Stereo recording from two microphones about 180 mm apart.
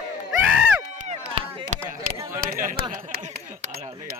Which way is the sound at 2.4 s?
50° right (ahead or behind).